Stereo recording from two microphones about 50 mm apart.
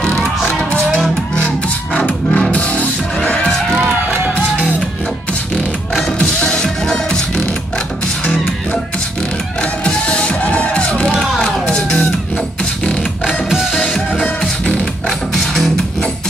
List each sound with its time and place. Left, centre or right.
0.5 s music: left
6.4 s music: centre
9.6 s music: centre
11.1 s music: centre
13.2 s music: centre
14.4 s music: centre
15.0 s music: centre